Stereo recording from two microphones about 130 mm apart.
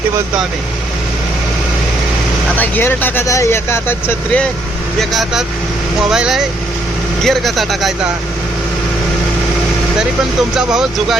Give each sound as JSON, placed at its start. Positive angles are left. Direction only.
{"t": 2.6, "sound": "speech", "side_deg": 15}
{"t": 4.9, "sound": "speech", "side_deg": 0}
{"t": 10.5, "sound": "speech", "side_deg": -5}